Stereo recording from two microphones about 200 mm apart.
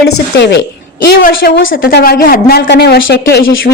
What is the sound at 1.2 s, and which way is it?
A woman's voice, 45° left (ahead or behind).